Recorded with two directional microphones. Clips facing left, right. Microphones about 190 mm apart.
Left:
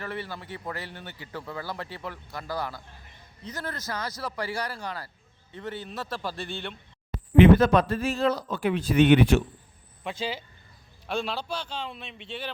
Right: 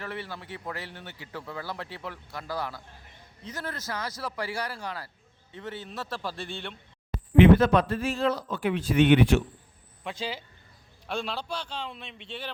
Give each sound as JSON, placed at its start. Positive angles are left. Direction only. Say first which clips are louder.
{"t": 0.0, "sound": "a man's voice", "louder": "left 2 dB", "side_deg": 0}
{"t": 7.3, "sound": "speech", "louder": "left 1 dB", "side_deg": 40}
{"t": 10.0, "sound": "a man's voice", "louder": "left 2 dB", "side_deg": 0}